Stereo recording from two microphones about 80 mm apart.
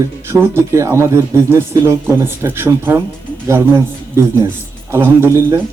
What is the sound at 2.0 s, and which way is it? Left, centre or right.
Speech, right.